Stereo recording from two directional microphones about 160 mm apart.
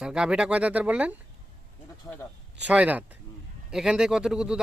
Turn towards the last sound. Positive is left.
turn(degrees=-5)  # may be behind; listen again after turning